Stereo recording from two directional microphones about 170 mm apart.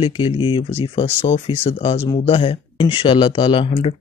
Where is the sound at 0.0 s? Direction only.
30° left (ahead or behind).